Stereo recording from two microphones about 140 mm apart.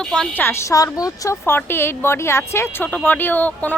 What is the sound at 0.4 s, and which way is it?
A woman's voice, 20° left (ahead or behind).